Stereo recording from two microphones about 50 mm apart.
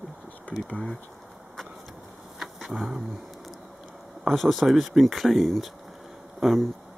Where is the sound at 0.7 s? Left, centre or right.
Left.